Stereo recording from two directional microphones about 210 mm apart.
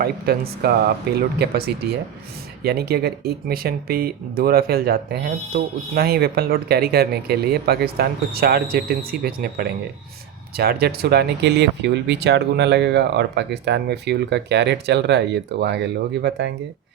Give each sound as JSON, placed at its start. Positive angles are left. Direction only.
{"t": 0.0, "sound": "speech", "side_deg": -45}